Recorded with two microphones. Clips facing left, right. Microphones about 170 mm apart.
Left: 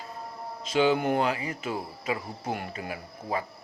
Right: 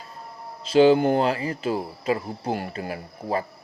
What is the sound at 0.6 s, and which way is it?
Speech, 35° right (ahead or behind).